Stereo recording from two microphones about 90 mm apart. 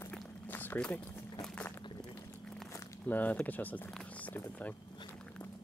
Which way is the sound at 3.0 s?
20° left (ahead or behind).